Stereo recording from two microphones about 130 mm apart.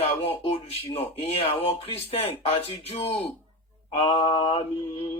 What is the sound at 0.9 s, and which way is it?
A man's voice, 50° left (ahead or behind).